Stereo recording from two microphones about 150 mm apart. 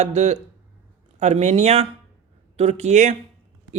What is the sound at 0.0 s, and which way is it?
Speech, 45° right (ahead or behind).